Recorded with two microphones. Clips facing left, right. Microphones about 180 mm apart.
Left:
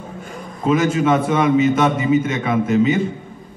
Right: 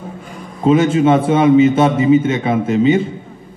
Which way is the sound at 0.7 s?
30° right (ahead or behind).